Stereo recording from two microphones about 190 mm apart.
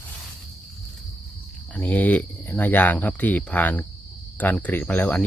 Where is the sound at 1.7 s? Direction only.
10° left (ahead or behind).